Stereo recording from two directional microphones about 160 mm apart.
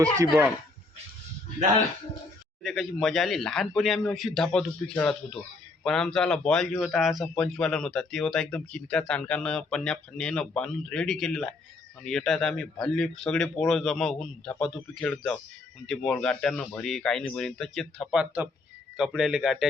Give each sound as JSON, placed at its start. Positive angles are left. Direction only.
{"t": 0.0, "sound": "speech", "side_deg": -15}
{"t": 2.6, "sound": "a man's voice", "side_deg": 0}